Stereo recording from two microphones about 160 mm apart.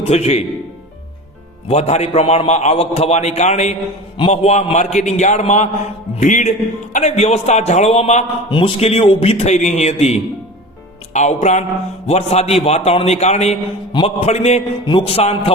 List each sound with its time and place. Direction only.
0.0 s a man's voice: 40° left (ahead or behind)
1.6 s a man's voice: 40° left (ahead or behind)